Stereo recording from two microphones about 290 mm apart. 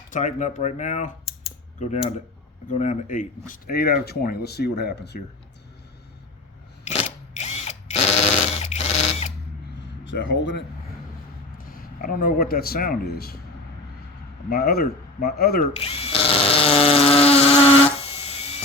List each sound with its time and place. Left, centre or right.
0.1 s speech: left
7.3 s drill: left
10.0 s speech: left
11.5 s speech: left
14.5 s speech: left
15.7 s drill: left